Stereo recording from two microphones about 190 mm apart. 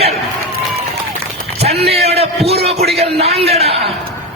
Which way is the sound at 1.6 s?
30° right (ahead or behind).